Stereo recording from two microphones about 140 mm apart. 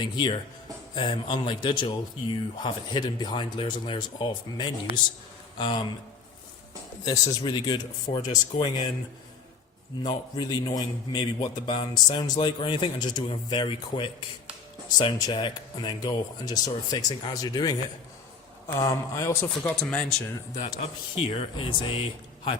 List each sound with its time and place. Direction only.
0.0 s a man's voice: 35° left (ahead or behind)
7.0 s a man's voice: 30° left (ahead or behind)
10.0 s a man's voice: 30° left (ahead or behind)
19.8 s speech: 10° left (ahead or behind)
21.2 s a man's voice: 40° left (ahead or behind)